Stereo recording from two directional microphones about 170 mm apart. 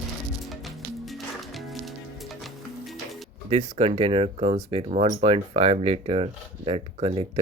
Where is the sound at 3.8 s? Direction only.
35° right (ahead or behind).